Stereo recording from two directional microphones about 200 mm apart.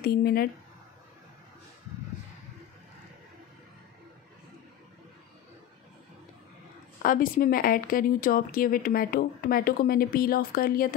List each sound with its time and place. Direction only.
0.0 s speech: 50° left (ahead or behind)
7.0 s speech: 45° left (ahead or behind)